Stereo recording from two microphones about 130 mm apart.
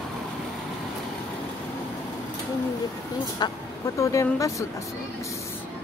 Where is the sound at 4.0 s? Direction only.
25° left (ahead or behind).